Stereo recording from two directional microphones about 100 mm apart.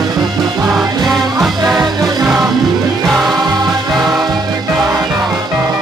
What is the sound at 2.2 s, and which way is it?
Music, 5° right (ahead or behind).